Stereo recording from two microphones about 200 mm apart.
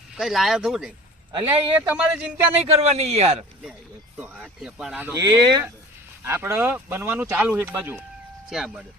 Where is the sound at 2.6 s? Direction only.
30° right (ahead or behind).